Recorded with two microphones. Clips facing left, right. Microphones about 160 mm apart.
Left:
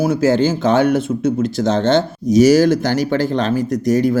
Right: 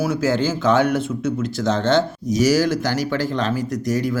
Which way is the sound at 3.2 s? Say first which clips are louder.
Left 5 dB; 25° left (ahead or behind).